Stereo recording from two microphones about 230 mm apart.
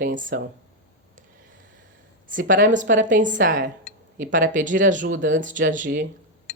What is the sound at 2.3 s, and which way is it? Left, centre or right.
A woman's voice, right.